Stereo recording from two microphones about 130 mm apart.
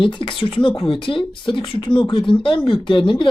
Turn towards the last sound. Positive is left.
turn(degrees=40)  # may be behind; listen again after turning